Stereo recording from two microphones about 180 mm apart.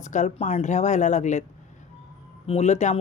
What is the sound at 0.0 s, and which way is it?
Speech, 40° left (ahead or behind).